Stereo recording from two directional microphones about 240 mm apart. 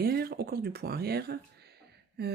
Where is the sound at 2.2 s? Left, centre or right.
Right.